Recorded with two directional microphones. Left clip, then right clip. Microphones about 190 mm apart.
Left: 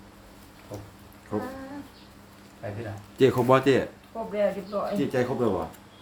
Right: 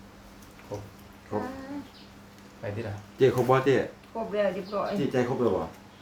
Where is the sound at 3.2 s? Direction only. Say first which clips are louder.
Left 2 dB; 55° left (ahead or behind).